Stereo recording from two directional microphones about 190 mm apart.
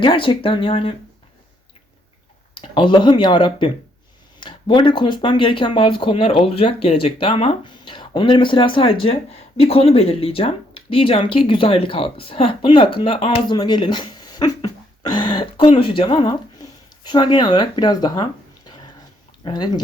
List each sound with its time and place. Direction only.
0.0 s speech: 25° left (ahead or behind)
2.6 s speech: 25° left (ahead or behind)